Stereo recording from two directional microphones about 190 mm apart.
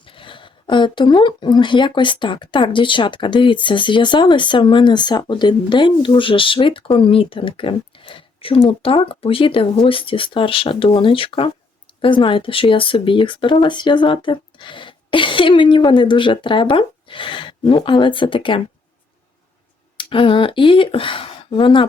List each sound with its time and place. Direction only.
0.0 s speech: 25° left (ahead or behind)
20.0 s speech: 25° left (ahead or behind)